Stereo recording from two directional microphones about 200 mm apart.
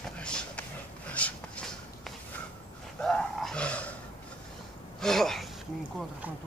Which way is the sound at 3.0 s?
5° left (ahead or behind).